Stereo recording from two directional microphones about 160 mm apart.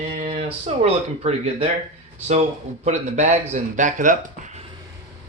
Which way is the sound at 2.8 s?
45° right (ahead or behind).